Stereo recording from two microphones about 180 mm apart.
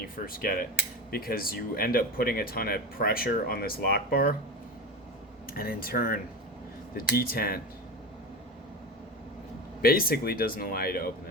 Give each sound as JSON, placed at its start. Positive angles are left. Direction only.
{"t": 0.3, "sound": "cutlery", "side_deg": 55}
{"t": 1.1, "sound": "speech", "side_deg": 55}
{"t": 5.5, "sound": "speech", "side_deg": 55}
{"t": 9.8, "sound": "speech", "side_deg": 55}